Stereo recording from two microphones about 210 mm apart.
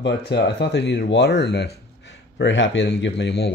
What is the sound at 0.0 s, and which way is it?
Speech, 55° left (ahead or behind).